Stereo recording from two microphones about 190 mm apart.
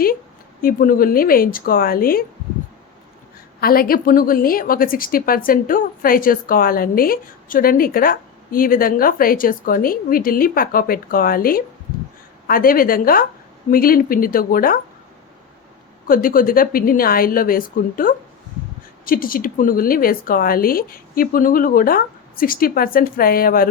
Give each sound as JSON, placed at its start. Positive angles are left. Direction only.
{"t": 0.6, "sound": "a woman's voice", "side_deg": 50}
{"t": 3.6, "sound": "a woman's voice", "side_deg": 50}
{"t": 16.0, "sound": "a woman's voice", "side_deg": 50}